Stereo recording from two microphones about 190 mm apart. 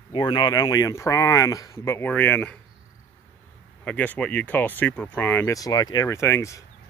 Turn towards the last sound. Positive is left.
turn(degrees=15)  # may be behind; listen again after turning